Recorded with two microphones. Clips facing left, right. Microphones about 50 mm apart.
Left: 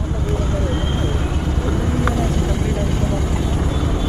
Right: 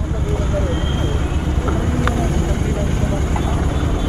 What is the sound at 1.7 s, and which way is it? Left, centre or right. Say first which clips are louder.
Vehicle: right 1 dB; right.